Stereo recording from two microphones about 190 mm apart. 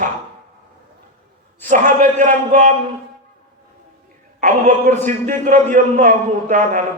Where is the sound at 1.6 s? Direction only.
45° right (ahead or behind).